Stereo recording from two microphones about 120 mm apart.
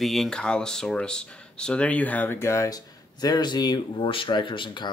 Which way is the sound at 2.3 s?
25° left (ahead or behind).